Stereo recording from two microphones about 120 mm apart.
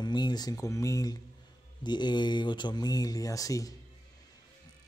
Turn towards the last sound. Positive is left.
turn(degrees=30)  # may be behind; listen again after turning